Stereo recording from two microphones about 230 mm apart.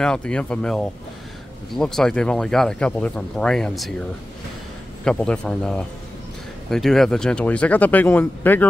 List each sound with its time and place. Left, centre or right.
0.0 s speech: centre
5.0 s speech: centre